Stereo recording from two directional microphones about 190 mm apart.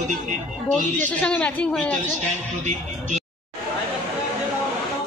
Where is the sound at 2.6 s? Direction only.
35° right (ahead or behind).